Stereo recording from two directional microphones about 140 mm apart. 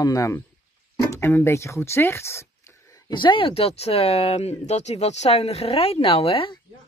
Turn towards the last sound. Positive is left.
turn(degrees=40)  # may be behind; listen again after turning